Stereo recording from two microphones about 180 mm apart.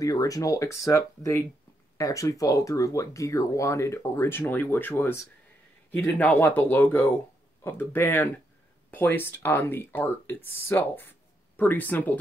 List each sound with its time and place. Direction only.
0.0 s speech: 20° left (ahead or behind)